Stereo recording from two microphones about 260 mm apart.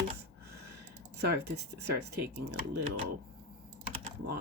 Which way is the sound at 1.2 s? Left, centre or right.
Right.